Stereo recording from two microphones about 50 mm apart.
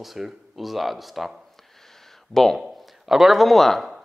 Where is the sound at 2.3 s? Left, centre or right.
Centre.